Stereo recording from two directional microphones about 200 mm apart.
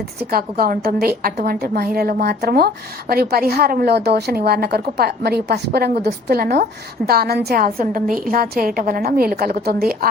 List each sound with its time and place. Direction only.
0.3 s a woman's voice: 50° right (ahead or behind)